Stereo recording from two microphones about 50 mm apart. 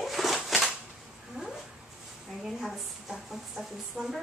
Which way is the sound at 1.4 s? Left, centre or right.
Centre.